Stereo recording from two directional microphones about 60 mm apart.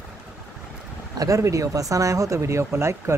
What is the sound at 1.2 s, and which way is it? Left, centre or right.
Speech, right.